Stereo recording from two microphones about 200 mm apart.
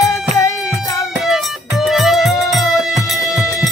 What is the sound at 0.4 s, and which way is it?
Music, 15° left (ahead or behind).